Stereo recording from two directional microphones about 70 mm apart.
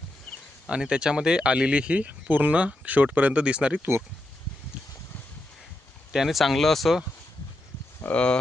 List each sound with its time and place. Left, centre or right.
0.7 s speech: centre
6.1 s speech: centre
8.0 s speech: centre